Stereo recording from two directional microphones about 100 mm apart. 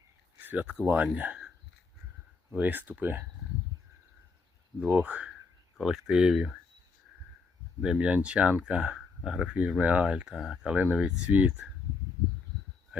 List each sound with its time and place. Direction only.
0.3 s speech: 15° right (ahead or behind)
2.5 s speech: 15° right (ahead or behind)
4.8 s speech: 15° right (ahead or behind)
7.8 s speech: 10° right (ahead or behind)
12.9 s heart sounds: 10° right (ahead or behind)